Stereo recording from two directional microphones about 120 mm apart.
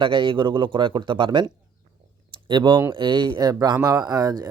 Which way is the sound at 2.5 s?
40° right (ahead or behind).